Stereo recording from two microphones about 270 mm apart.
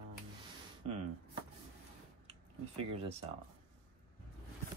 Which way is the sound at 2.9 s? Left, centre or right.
Right.